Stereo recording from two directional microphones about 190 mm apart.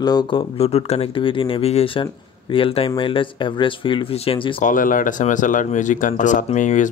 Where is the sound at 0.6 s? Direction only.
30° left (ahead or behind).